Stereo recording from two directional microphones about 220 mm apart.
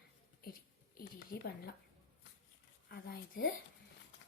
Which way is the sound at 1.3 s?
45° left (ahead or behind).